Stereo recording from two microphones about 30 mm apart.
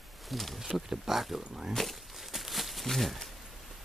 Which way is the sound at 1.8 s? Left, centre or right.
Centre.